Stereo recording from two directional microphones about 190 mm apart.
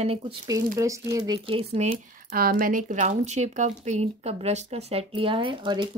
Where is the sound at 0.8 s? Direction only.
15° right (ahead or behind); by 2.3 s 35° right (ahead or behind).